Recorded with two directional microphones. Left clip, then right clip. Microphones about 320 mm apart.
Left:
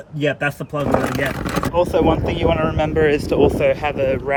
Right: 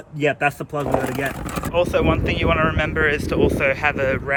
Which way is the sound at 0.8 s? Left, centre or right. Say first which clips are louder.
Left 3 dB; left.